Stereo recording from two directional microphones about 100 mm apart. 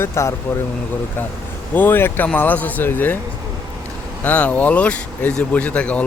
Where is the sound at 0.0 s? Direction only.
25° left (ahead or behind).